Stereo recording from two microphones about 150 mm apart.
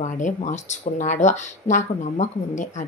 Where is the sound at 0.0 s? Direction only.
50° left (ahead or behind).